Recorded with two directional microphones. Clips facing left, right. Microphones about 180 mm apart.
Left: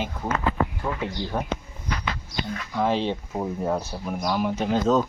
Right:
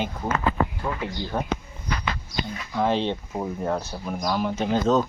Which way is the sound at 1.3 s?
10° left (ahead or behind).